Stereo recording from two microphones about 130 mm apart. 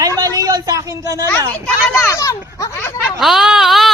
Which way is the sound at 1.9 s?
20° left (ahead or behind).